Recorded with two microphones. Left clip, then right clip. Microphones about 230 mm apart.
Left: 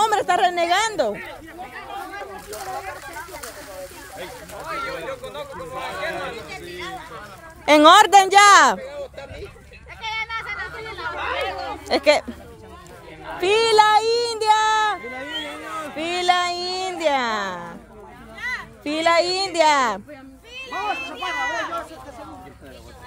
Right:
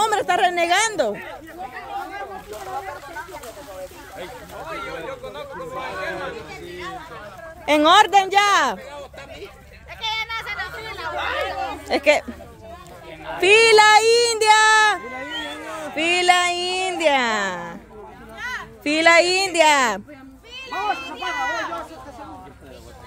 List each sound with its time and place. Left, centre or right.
0.0 s a woman's voice: centre
4.6 s speech: centre
6.7 s speech: centre
7.6 s speech: left
10.0 s a sound: right
11.1 s chatter: right
11.9 s speech: centre
13.4 s a child's voice: centre